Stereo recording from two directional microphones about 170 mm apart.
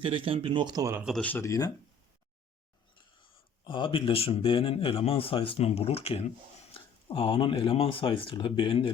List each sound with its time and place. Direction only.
0.0 s speech: 30° right (ahead or behind)
1.0 s speech: 5° left (ahead or behind)
3.6 s speech: 30° left (ahead or behind)